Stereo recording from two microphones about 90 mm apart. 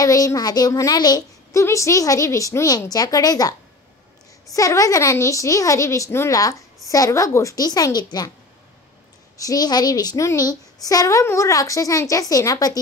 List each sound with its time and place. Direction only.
0.0 s a woman's voice: 40° left (ahead or behind)
1.5 s a woman's voice: 35° left (ahead or behind)
9.4 s a woman's voice: 45° left (ahead or behind)